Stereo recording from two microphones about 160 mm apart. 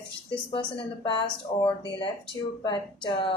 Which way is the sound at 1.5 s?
30° left (ahead or behind).